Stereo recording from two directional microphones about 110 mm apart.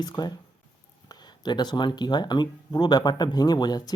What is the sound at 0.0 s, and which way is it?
Speech, 40° left (ahead or behind).